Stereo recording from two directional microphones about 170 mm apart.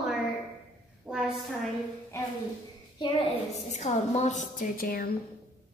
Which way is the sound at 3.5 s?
45° left (ahead or behind).